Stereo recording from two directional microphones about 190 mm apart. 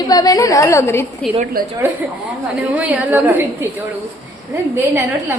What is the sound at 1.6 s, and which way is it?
Speech, 50° right (ahead or behind).